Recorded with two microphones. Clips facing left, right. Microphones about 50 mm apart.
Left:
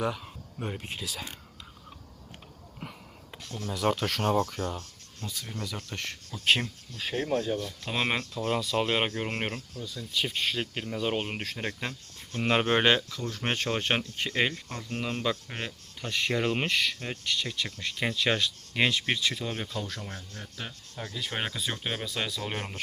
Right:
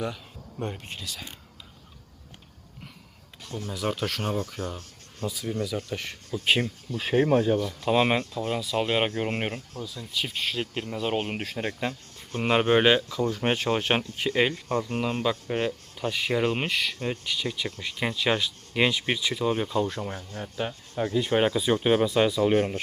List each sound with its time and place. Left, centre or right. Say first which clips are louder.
0.6 s speech: right 1 dB; centre
3.7 s speech: left 2 dB; centre
7.0 s speech: right 7 dB; right
7.6 s speech: right 8 dB; centre
8.4 s speech: left 1 dB; centre
13.1 s speech: right 6 dB; centre
15.0 s speech: right 4 dB; centre; by 21.3 s right
21.3 s speech: right 10 dB; centre
22.4 s speech: right 12 dB; centre